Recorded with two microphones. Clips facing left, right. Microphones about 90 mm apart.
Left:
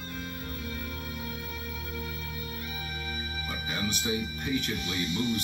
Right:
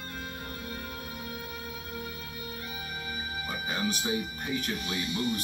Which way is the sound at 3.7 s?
35° right (ahead or behind).